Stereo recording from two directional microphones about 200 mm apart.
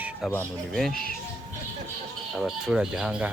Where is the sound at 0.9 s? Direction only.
45° left (ahead or behind).